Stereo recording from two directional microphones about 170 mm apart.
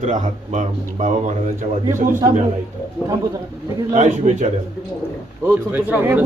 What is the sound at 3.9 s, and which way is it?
Speech, 45° right (ahead or behind).